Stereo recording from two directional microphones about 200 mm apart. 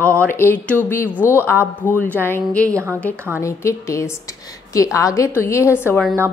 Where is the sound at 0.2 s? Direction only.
10° left (ahead or behind).